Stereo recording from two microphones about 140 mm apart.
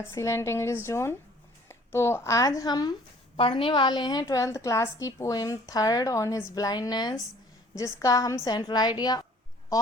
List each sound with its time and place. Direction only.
0.1 s a woman's voice: 20° left (ahead or behind)
3.3 s a woman's voice: 40° left (ahead or behind)